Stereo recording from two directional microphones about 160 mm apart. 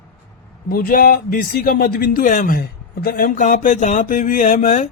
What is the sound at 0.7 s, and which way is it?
Speech, 65° left (ahead or behind).